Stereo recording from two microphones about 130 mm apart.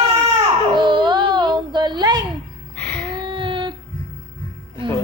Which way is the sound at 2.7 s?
10° left (ahead or behind).